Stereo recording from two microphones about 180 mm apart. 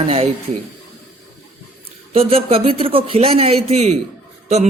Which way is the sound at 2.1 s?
35° right (ahead or behind).